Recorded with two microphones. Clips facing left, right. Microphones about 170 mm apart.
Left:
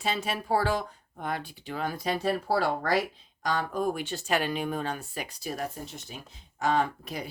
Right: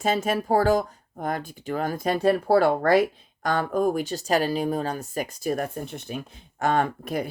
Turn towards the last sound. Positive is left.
turn(degrees=-50)  # may be behind; listen again after turning